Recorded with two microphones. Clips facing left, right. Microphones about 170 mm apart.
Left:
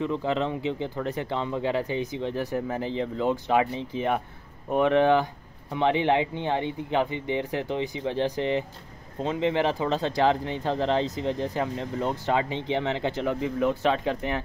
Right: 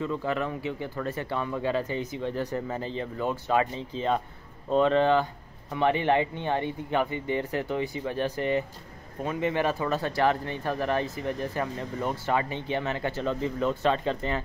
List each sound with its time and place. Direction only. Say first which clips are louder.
0.0 s speech: left 3 dB; 20° left (ahead or behind)